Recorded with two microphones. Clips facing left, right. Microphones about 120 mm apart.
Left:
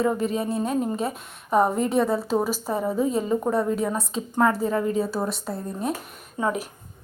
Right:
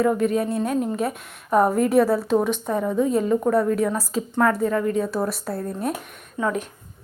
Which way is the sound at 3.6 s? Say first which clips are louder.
Right 3 dB; 25° left (ahead or behind).